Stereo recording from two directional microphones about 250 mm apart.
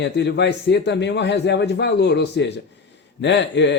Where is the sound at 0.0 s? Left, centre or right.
Left.